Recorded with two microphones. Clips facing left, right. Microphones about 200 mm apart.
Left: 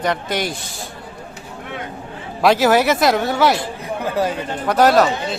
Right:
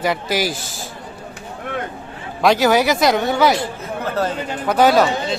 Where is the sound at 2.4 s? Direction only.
Centre (ahead or behind).